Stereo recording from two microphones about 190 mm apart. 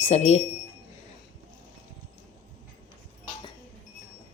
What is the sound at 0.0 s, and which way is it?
Speech, 35° left (ahead or behind).